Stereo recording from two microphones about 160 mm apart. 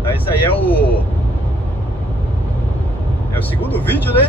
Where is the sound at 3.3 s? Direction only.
10° left (ahead or behind).